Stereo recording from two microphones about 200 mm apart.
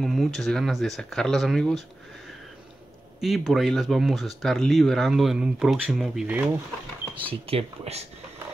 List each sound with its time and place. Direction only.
0.0 s speech: centre (ahead or behind)
3.2 s speech: centre (ahead or behind)
7.2 s speech: 30° right (ahead or behind)